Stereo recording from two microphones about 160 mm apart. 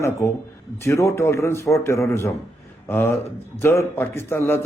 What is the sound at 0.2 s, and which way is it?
A man's voice, 15° left (ahead or behind).